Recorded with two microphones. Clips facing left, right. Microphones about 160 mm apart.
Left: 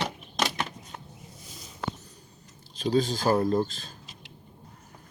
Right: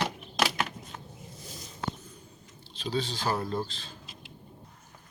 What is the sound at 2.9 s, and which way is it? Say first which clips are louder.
Speech: left 7 dB; 45° left (ahead or behind).